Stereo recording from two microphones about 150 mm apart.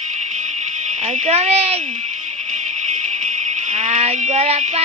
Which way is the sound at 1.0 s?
45° right (ahead or behind).